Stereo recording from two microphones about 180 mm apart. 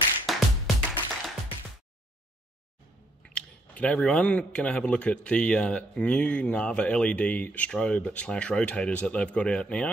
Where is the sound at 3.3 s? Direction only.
5° left (ahead or behind).